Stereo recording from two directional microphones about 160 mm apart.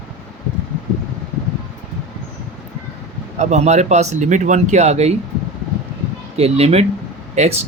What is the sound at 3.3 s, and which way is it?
Speech, 45° right (ahead or behind).